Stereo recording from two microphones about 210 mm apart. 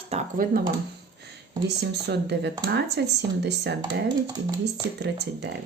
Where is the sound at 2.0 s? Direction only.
50° right (ahead or behind).